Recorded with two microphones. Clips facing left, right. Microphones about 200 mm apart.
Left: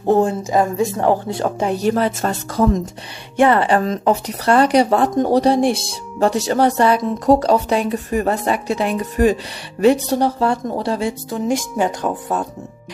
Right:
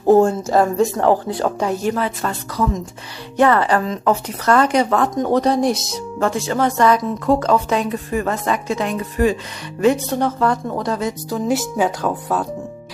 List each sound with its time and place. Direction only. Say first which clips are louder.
0.2 s a woman's voice: right 2 dB; 15° left (ahead or behind)
1.9 s speech: left 3 dB; 35° left (ahead or behind)
3.3 s speech: left 1 dB; 20° left (ahead or behind)
8.9 s speech: left 3 dB; 40° left (ahead or behind)
11.2 s speech: even; 5° right (ahead or behind)